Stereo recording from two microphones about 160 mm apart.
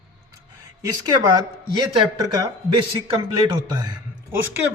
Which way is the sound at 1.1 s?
25° right (ahead or behind).